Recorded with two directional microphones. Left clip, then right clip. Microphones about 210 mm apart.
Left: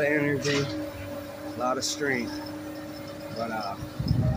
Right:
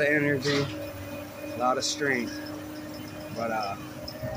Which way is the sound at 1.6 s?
Centre (ahead or behind).